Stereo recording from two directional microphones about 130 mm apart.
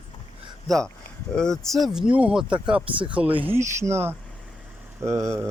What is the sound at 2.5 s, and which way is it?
Speech, 40° right (ahead or behind).